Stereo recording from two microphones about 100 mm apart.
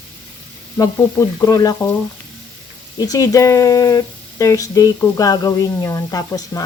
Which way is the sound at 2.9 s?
35° left (ahead or behind).